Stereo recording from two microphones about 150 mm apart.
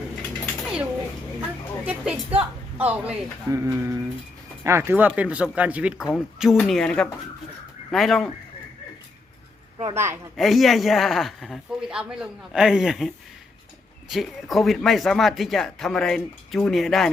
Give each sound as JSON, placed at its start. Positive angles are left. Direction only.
{"t": 1.4, "sound": "a sound", "side_deg": -10}
{"t": 3.5, "sound": "speech", "side_deg": -20}
{"t": 9.9, "sound": "speech", "side_deg": -15}
{"t": 10.3, "sound": "speech", "side_deg": 0}